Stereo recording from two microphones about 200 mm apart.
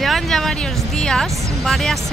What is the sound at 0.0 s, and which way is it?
Music, centre (ahead or behind).